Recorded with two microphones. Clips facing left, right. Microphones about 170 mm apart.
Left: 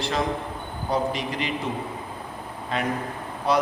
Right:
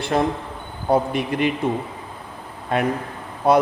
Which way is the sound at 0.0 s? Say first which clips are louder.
Right 5 dB; 55° right (ahead or behind).